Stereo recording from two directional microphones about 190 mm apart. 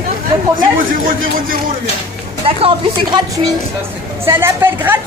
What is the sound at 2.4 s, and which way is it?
Speech, 30° right (ahead or behind).